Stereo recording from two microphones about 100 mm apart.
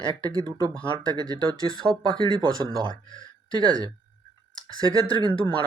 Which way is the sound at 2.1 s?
55° right (ahead or behind).